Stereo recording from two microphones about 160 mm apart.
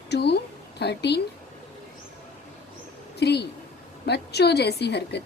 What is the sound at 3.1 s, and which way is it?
A woman's voice, 90° left.